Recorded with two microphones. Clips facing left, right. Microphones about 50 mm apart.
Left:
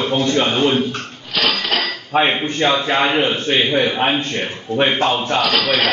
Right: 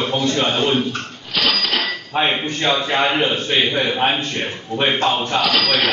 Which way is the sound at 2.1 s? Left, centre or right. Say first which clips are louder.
Left 4 dB; centre.